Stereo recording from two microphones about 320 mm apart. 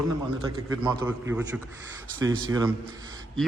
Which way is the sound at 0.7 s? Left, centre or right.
Centre.